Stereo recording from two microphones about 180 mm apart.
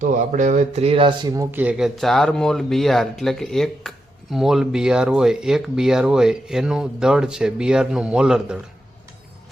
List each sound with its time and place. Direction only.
0.0 s speech: 45° right (ahead or behind)
1.4 s speech: 10° right (ahead or behind)